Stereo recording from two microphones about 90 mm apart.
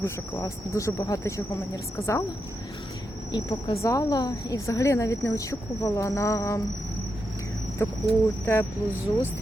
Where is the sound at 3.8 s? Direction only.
40° left (ahead or behind).